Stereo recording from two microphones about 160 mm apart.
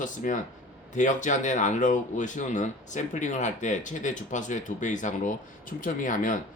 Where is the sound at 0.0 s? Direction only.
55° left (ahead or behind).